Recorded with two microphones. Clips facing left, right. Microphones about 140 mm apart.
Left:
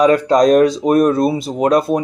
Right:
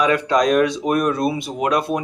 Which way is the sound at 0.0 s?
40° left (ahead or behind).